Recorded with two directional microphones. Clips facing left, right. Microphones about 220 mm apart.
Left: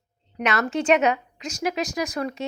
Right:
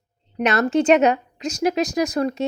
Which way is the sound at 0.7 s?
40° right (ahead or behind).